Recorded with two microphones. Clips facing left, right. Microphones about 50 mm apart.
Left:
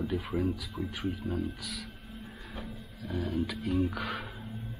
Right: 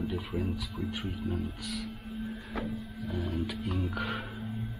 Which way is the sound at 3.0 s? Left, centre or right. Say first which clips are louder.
Left 2 dB; centre.